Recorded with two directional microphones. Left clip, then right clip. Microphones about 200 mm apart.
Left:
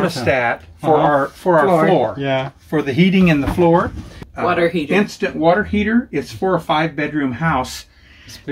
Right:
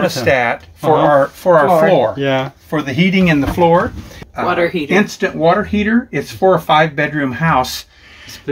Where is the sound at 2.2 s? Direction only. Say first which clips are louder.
Right 3 dB; 20° right (ahead or behind).